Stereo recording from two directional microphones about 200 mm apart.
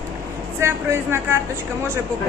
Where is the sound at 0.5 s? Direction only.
15° right (ahead or behind).